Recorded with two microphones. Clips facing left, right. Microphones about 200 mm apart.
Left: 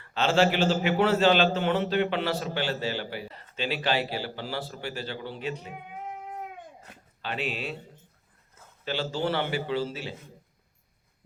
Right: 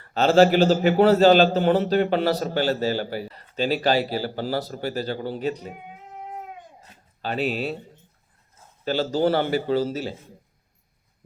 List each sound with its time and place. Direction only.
0.0 s a man's voice: 40° right (ahead or behind)
7.2 s a man's voice: 40° right (ahead or behind)
8.8 s a man's voice: 40° right (ahead or behind)